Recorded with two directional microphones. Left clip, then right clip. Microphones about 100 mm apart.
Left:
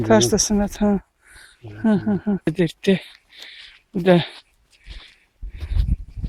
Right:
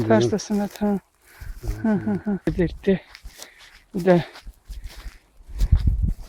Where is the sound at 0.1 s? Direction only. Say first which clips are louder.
Left 4 dB; 25° left (ahead or behind).